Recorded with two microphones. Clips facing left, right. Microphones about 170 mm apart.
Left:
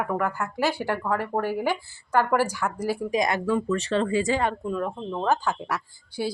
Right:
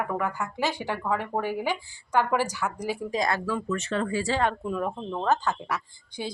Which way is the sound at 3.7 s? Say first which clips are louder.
Left 4 dB; 35° left (ahead or behind).